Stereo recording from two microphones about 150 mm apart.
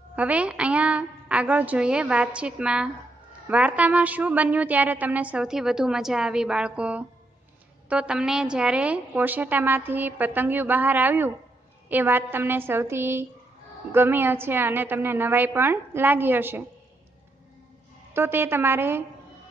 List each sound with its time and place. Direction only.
0.1 s a woman's voice: 10° right (ahead or behind)
18.1 s a woman's voice: 15° right (ahead or behind)